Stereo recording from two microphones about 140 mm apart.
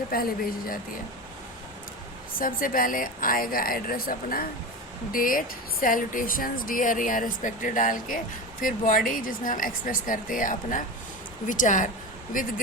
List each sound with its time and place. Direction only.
0.1 s speech: 90° left
2.4 s speech: 80° left